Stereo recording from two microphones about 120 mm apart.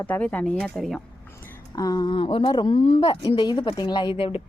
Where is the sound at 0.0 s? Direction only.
15° left (ahead or behind).